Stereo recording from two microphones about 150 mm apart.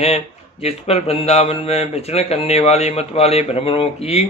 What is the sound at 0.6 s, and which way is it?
A man's voice, 45° left (ahead or behind).